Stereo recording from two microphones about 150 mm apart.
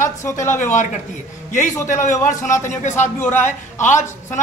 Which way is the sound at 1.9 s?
55° left (ahead or behind).